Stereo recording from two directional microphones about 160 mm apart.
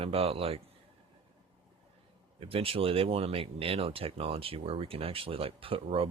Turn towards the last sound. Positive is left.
turn(degrees=-35)  # may be behind; listen again after turning